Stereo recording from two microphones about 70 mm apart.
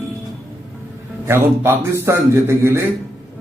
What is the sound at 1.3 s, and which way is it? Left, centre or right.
Speech, right.